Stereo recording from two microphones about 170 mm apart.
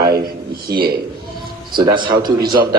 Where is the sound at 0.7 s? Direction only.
60° right (ahead or behind).